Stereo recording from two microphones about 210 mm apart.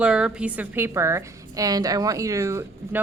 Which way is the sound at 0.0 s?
5° right (ahead or behind).